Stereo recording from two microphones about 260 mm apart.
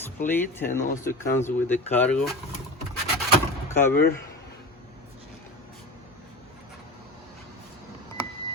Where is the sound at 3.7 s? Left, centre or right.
Centre.